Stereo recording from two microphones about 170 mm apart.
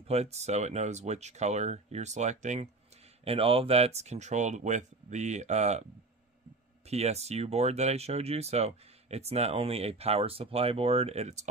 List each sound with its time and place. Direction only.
0.0 s speech: 35° right (ahead or behind)
3.3 s speech: 35° right (ahead or behind)
6.9 s speech: 40° right (ahead or behind)